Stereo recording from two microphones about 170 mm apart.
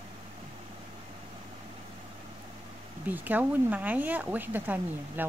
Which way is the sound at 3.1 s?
10° right (ahead or behind).